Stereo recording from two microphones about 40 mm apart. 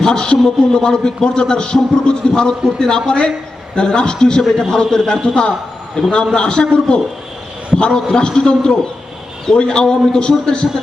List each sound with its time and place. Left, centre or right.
0.0 s a man's voice: centre